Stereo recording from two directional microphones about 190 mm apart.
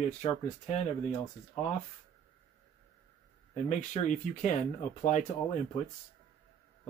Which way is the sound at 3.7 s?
40° left (ahead or behind).